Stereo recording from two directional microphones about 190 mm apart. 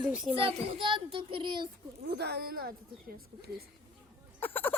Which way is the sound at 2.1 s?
60° right (ahead or behind).